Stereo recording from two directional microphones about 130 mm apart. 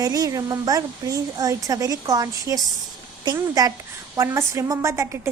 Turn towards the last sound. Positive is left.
turn(degrees=-20)  # may be behind; listen again after turning